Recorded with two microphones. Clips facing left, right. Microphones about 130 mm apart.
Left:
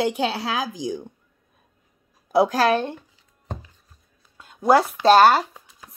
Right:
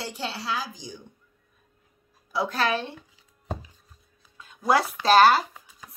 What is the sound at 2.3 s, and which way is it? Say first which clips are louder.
Speech: left 8 dB; 45° left (ahead or behind).